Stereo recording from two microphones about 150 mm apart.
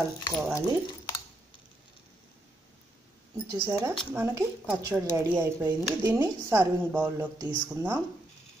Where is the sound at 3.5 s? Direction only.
15° right (ahead or behind).